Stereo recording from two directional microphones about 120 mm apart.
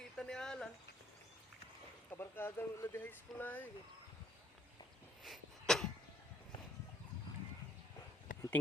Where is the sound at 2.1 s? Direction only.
20° left (ahead or behind).